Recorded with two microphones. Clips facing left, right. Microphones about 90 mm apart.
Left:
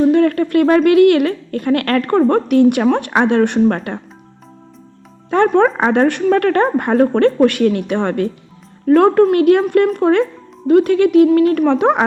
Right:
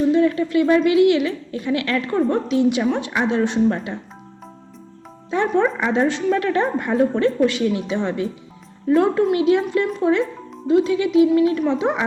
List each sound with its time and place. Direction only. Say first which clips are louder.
0.0 s a woman's voice: left 4 dB; 60° left (ahead or behind)
5.3 s a woman's voice: left 6 dB; 60° left (ahead or behind)